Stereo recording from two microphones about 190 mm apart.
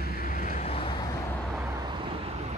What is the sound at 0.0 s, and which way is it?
Vehicle, 45° left (ahead or behind).